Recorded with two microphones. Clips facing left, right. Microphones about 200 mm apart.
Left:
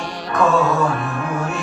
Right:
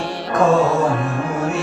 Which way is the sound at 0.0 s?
30° right (ahead or behind).